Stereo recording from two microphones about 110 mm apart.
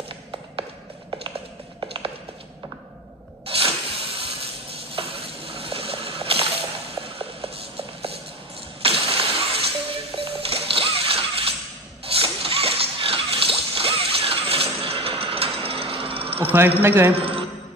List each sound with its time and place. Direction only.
1.8 s tap: 55° right (ahead or behind)
3.4 s spray: 60° right (ahead or behind)
4.9 s a sound: 60° right (ahead or behind)
10.1 s music: 60° right (ahead or behind)
12.1 s zipper: 60° right (ahead or behind)
16.5 s a man's voice: 20° right (ahead or behind)
17.1 s a sound: 60° right (ahead or behind)